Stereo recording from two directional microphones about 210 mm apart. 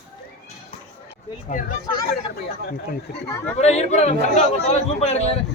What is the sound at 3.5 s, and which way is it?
A man's voice, 30° left (ahead or behind).